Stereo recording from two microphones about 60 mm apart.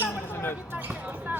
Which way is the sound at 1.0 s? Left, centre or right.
Right.